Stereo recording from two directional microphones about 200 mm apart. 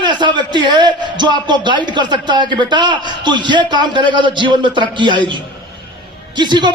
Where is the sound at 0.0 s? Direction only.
25° right (ahead or behind).